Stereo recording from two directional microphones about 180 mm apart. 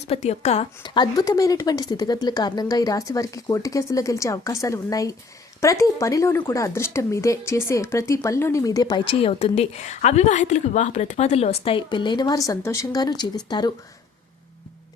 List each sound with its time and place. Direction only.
0.0 s speech: 35° left (ahead or behind)